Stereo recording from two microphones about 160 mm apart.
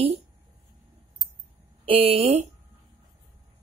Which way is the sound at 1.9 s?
35° right (ahead or behind).